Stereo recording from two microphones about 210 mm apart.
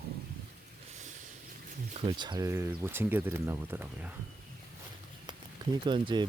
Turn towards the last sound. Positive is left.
turn(degrees=-20)  # may be behind; listen again after turning